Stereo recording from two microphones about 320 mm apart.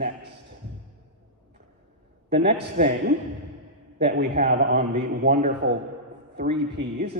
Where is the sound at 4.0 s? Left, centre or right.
Right.